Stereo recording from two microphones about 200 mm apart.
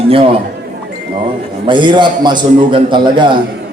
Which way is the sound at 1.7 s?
25° right (ahead or behind).